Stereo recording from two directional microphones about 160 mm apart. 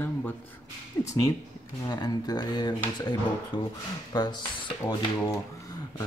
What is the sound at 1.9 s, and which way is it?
Speech, 25° left (ahead or behind).